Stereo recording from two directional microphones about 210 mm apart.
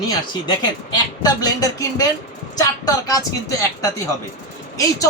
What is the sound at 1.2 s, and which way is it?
A woman's voice, 15° left (ahead or behind).